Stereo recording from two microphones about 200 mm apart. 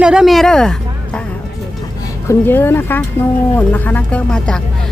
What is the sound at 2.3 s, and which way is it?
Speech, 10° left (ahead or behind).